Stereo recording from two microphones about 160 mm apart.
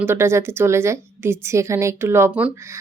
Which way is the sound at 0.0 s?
15° right (ahead or behind).